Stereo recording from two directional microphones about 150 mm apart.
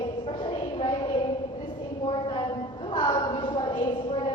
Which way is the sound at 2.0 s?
35° left (ahead or behind).